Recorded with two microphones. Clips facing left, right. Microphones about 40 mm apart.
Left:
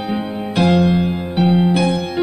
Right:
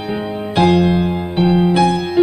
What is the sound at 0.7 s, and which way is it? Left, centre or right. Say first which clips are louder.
Music: right 1 dB; right.